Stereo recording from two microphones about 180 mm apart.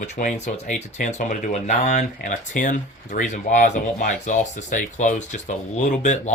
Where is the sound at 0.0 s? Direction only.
40° left (ahead or behind).